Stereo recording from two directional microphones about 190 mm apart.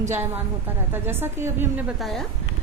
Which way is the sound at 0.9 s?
10° right (ahead or behind).